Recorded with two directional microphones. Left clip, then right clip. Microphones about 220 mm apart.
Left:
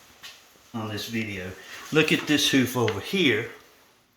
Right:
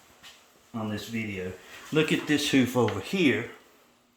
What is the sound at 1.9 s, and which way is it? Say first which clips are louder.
Speech: left 3 dB; 10° left (ahead or behind).